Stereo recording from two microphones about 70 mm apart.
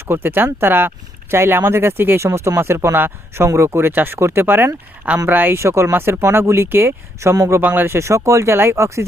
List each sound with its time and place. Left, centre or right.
0.0 s speech: right
7.6 s speech: right
7.9 s speech: right